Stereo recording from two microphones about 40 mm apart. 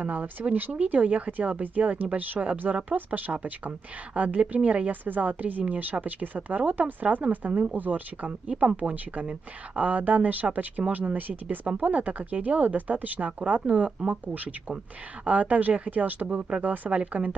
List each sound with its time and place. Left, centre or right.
0.0 s a woman's voice: right
0.7 s speech: right
5.0 s a woman's voice: right
8.3 s a woman's voice: right
13.7 s speech: right
14.2 s speech: right
16.7 s a woman's voice: right